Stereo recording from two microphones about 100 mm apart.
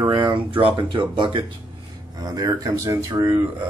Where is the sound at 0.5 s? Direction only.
60° right (ahead or behind).